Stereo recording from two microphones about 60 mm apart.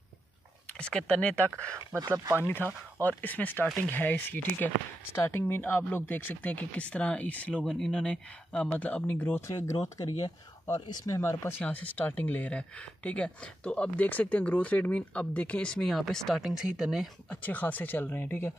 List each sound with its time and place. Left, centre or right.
0.7 s speech: centre
2.0 s speech: right
2.4 s speech: left
5.1 s speech: left
5.4 s speech: left
7.7 s speech: centre
9.5 s speech: left
11.1 s speech: left
11.6 s speech: left
15.7 s speech: centre
16.3 s speech: centre
17.3 s speech: left